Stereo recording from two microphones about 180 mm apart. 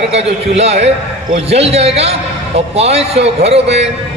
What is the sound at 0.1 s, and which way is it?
A man's voice, 35° right (ahead or behind).